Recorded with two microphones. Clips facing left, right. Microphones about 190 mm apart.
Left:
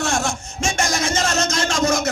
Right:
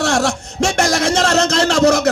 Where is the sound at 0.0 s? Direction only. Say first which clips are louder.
Right 6 dB; 70° right (ahead or behind).